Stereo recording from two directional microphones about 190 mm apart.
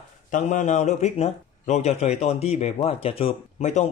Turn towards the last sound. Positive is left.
turn(degrees=40)  # may be behind; listen again after turning